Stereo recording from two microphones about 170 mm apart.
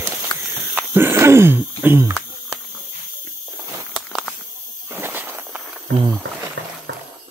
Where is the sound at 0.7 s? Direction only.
15° right (ahead or behind).